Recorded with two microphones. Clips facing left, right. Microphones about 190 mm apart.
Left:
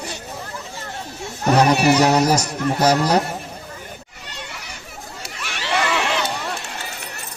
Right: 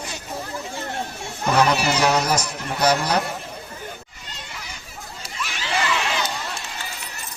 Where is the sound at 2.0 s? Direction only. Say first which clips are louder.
Left 4 dB; 40° left (ahead or behind).